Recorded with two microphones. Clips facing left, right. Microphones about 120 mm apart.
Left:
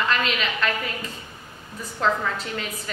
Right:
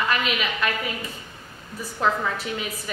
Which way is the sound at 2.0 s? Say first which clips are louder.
Even; 10° right (ahead or behind).